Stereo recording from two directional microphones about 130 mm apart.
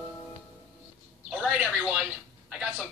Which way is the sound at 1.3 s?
5° right (ahead or behind).